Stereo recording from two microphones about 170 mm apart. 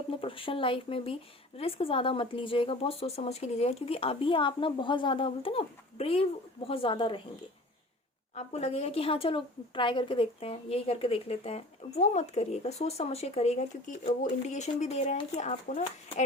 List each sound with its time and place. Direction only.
0.1 s a woman's voice: 30° left (ahead or behind)
8.4 s a woman's voice: 40° left (ahead or behind)